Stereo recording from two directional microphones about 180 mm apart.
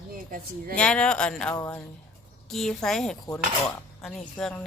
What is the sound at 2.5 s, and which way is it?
Speech, centre (ahead or behind).